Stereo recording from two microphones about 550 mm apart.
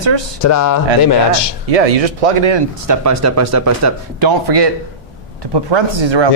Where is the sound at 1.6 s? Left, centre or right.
Right.